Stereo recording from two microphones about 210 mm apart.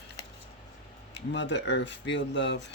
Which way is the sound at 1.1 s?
55° left (ahead or behind).